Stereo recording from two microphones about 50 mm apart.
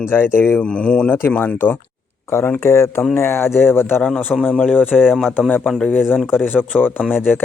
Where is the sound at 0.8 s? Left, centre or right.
Left.